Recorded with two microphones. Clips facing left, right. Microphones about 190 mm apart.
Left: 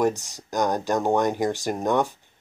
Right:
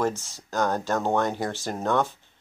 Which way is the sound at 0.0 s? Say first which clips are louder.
Left 4 dB; 15° left (ahead or behind).